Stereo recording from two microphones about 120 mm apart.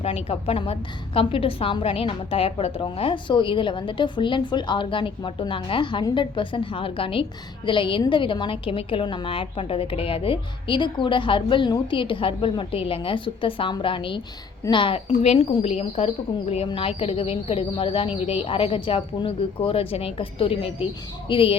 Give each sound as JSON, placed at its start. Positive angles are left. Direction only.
{"t": 0.0, "sound": "a woman's voice", "side_deg": 55}